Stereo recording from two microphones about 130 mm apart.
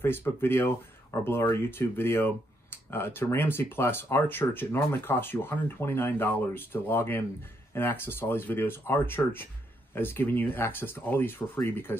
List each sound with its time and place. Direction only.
0.0 s speech: 15° left (ahead or behind)